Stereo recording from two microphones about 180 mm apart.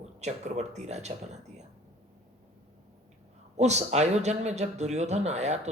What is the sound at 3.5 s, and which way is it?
Speech, 40° right (ahead or behind).